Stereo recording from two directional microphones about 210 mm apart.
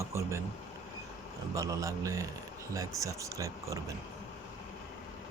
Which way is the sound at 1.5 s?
15° right (ahead or behind).